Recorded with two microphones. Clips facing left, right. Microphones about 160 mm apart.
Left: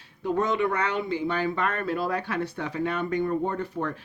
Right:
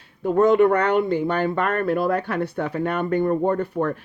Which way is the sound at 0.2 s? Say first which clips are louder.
Right 9 dB; 50° right (ahead or behind).